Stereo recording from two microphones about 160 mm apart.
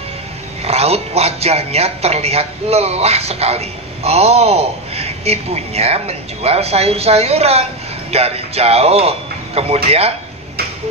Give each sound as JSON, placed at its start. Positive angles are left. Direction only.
{"t": 0.7, "sound": "speech", "side_deg": -40}